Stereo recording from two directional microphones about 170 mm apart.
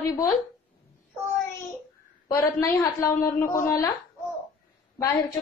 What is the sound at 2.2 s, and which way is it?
A woman's voice, 20° left (ahead or behind).